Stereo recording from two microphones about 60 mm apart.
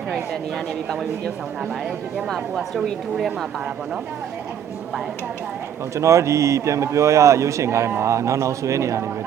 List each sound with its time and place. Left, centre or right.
0.1 s a woman's voice: centre
5.9 s a man's voice: right